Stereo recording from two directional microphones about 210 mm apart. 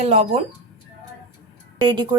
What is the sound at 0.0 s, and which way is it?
Speech, 30° right (ahead or behind).